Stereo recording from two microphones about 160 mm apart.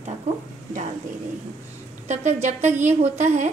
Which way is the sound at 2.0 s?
45° right (ahead or behind).